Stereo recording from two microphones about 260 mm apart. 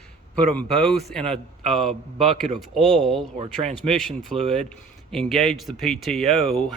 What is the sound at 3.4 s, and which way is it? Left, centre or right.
Speech, right.